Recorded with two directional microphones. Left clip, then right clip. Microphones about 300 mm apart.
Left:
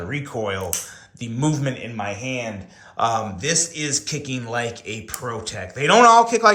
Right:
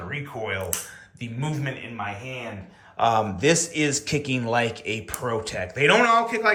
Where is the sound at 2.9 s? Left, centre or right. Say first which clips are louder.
Even; centre.